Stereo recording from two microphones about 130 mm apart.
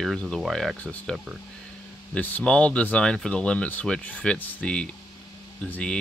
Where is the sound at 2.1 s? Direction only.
10° left (ahead or behind).